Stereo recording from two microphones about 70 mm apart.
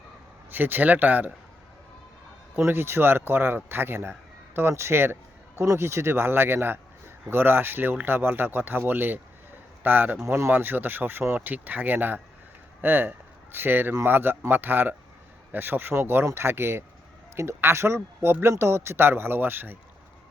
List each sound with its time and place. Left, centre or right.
0.5 s speech: right
2.6 s speech: right